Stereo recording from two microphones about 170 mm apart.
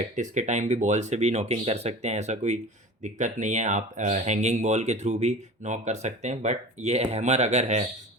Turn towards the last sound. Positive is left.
turn(degrees=-40)  # may be behind; listen again after turning